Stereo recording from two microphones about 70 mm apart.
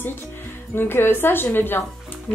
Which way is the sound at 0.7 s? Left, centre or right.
Left.